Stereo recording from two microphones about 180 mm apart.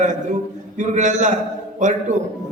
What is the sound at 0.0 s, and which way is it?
A man's voice, 45° right (ahead or behind).